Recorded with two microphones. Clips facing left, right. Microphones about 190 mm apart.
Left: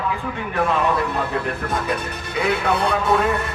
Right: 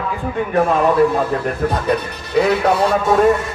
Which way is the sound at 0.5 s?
45° right (ahead or behind).